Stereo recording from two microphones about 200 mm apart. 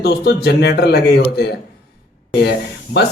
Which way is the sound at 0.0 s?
55° left (ahead or behind).